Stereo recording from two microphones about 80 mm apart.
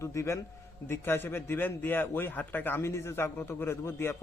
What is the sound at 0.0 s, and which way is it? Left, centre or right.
A man's voice, left.